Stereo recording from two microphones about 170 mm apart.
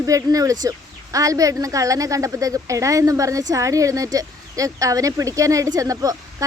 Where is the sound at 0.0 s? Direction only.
20° right (ahead or behind).